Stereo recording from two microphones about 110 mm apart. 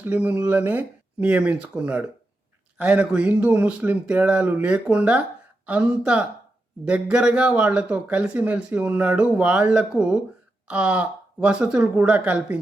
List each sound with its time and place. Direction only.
0.0 s a man's voice: 15° right (ahead or behind)